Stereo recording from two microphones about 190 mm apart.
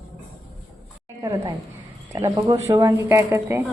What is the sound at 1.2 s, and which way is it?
A woman's voice, 20° right (ahead or behind).